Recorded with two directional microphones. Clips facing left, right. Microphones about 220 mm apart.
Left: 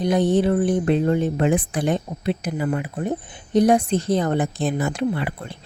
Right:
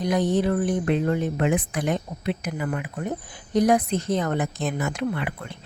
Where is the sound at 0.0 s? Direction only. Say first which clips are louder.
Left 4 dB; 30° left (ahead or behind).